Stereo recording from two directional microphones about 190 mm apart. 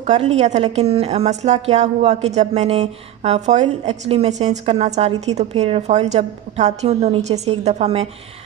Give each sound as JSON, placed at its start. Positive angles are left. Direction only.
{"t": 0.0, "sound": "a woman's voice", "side_deg": -35}